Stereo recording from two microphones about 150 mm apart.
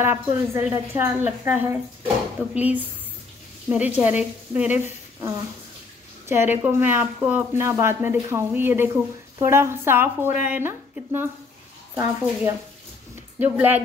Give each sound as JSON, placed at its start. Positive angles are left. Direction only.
{"t": 0.0, "sound": "speech", "side_deg": -15}